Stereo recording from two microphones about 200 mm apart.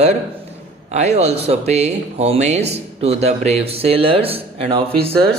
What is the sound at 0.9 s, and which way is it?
Speech, 35° right (ahead or behind).